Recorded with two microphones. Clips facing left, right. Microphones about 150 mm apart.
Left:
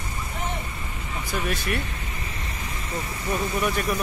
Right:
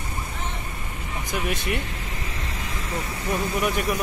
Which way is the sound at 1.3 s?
20° right (ahead or behind).